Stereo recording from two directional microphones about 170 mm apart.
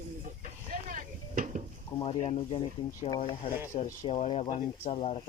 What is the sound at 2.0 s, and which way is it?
Speech, 35° left (ahead or behind).